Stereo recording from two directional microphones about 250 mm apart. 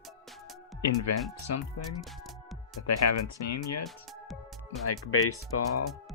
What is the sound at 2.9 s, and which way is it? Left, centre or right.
Speech, left.